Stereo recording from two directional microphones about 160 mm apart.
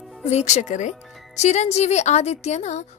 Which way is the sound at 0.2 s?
45° left (ahead or behind).